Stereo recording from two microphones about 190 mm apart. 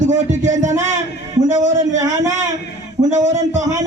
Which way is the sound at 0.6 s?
40° right (ahead or behind).